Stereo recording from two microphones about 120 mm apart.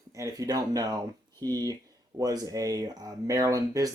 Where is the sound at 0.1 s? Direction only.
30° right (ahead or behind).